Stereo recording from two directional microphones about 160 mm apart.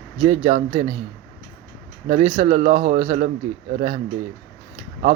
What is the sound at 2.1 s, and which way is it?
A man's voice, 35° right (ahead or behind).